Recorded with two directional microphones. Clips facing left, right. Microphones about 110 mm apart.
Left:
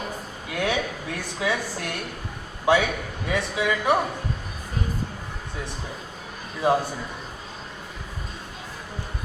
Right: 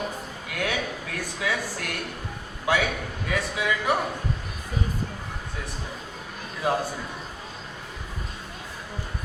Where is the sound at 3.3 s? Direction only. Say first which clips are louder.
Left 2 dB; 25° left (ahead or behind).